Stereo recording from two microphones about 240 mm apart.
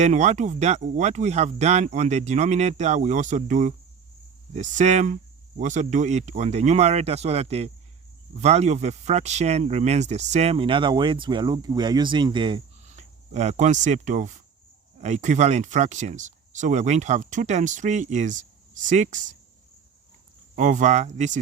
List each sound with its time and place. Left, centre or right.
0.0 s speech: right
20.6 s speech: right